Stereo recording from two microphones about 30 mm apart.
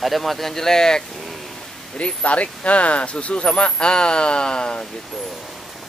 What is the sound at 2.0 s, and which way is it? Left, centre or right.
Speech, left.